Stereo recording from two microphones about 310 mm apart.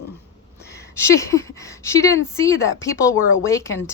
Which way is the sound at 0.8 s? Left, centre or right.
Centre.